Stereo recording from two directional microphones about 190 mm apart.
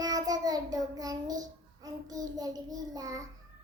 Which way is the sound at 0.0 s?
20° right (ahead or behind).